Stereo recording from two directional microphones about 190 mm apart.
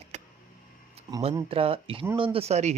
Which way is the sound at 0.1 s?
35° right (ahead or behind).